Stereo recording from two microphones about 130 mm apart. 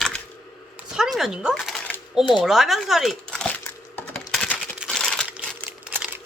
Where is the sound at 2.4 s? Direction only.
Centre (ahead or behind).